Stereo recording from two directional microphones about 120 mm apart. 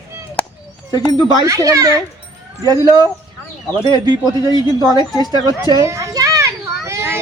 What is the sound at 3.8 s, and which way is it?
A child's voice, 35° right (ahead or behind).